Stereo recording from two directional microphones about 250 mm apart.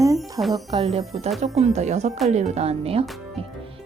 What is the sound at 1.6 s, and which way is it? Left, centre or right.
Speech, right.